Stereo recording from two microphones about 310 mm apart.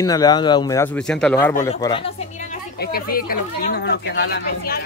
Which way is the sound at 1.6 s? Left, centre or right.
Centre.